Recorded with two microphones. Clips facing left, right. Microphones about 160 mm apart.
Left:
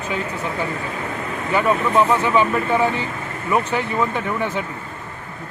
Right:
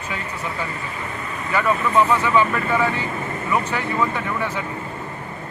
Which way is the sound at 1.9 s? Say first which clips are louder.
Even; 20° left (ahead or behind).